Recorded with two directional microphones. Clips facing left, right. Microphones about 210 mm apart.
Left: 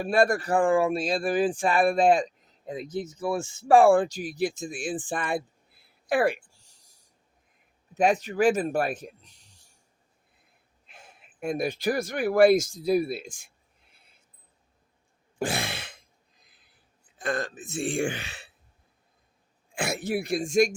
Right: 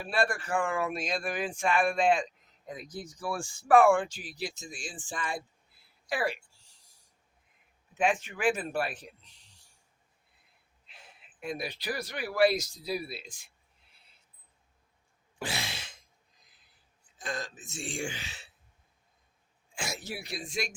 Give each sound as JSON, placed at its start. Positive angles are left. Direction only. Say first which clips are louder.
{"t": 0.0, "sound": "speech", "louder": "left 8 dB", "side_deg": 45}
{"t": 2.6, "sound": "speech", "louder": "left 9 dB", "side_deg": 25}
{"t": 7.9, "sound": "speech", "louder": "left 7 dB", "side_deg": 40}
{"t": 10.8, "sound": "speech", "louder": "left 4 dB", "side_deg": 50}
{"t": 15.4, "sound": "throat clearing", "louder": "left 8 dB", "side_deg": 50}
{"t": 17.2, "sound": "speech", "louder": "left 8 dB", "side_deg": 60}
{"t": 19.7, "sound": "speech", "louder": "left 10 dB", "side_deg": 60}